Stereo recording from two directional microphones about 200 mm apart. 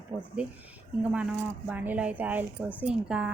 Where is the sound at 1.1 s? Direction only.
5° right (ahead or behind).